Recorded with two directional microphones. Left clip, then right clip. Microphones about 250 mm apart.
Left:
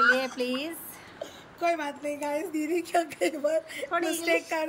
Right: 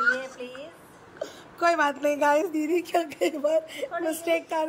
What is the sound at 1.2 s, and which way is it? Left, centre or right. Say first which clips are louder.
A woman's voice: right 5 dB; centre.